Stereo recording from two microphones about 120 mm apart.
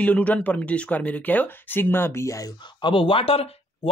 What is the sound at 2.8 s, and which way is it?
Speech, 45° left (ahead or behind).